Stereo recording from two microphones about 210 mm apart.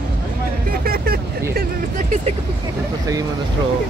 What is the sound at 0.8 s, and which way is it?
Vehicle, 45° right (ahead or behind).